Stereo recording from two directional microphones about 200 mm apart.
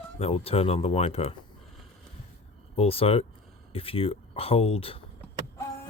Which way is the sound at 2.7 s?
30° left (ahead or behind).